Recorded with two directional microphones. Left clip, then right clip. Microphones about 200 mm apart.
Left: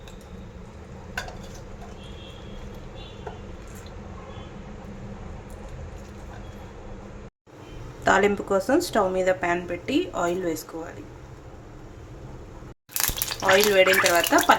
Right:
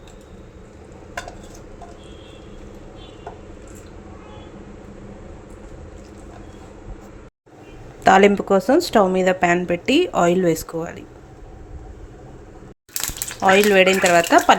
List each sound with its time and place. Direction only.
8.0 s speech: 35° right (ahead or behind)
13.4 s speech: 40° right (ahead or behind)